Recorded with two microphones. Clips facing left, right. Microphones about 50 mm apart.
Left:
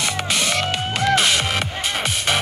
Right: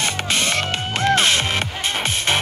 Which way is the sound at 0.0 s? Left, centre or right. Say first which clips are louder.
Right 1 dB; right.